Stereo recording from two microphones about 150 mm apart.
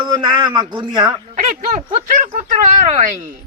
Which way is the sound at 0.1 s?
30° right (ahead or behind).